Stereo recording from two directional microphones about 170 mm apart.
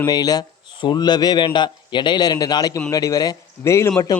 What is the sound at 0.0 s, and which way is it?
A man's voice, 20° left (ahead or behind).